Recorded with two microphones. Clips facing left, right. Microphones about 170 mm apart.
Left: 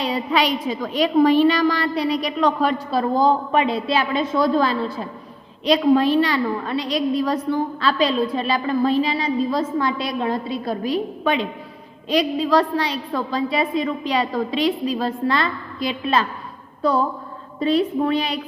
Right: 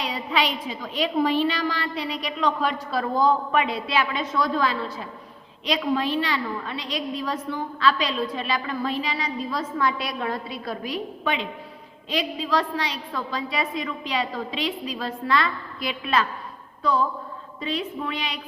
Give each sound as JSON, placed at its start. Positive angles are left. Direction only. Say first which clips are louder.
{"t": 0.3, "sound": "a woman's voice", "louder": "left 3 dB", "side_deg": 45}
{"t": 11.2, "sound": "a woman's voice", "louder": "left 6 dB", "side_deg": 40}